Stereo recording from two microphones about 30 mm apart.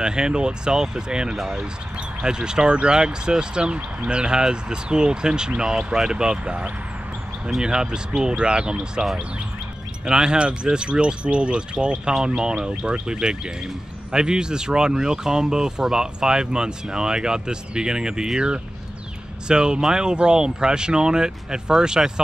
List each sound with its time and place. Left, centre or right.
0.0 s speech: right
1.3 s speech: centre
1.6 s speech: right
6.4 s speech: right
7.6 s speech: right
12.1 s speech: right